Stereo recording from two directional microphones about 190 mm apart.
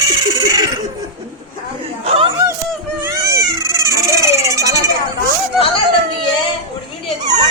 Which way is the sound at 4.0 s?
15° right (ahead or behind).